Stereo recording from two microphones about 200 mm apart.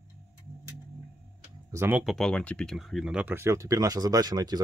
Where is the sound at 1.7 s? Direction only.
10° right (ahead or behind).